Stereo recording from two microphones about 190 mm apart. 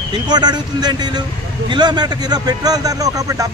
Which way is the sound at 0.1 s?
20° right (ahead or behind).